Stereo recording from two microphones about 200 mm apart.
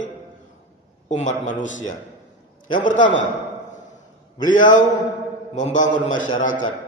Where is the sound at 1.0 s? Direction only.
35° left (ahead or behind).